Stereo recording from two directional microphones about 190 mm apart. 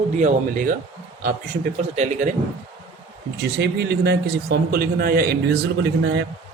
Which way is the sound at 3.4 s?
60° right (ahead or behind).